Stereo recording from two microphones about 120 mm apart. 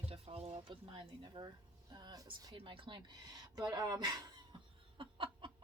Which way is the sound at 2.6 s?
45° right (ahead or behind).